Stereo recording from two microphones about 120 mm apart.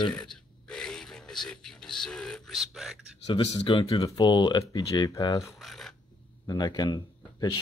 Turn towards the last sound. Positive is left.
turn(degrees=35)  # may be behind; listen again after turning